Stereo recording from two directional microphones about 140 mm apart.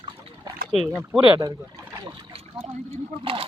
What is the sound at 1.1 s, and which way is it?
Speech, 5° right (ahead or behind).